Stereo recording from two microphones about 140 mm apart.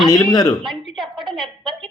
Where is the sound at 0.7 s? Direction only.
Centre (ahead or behind).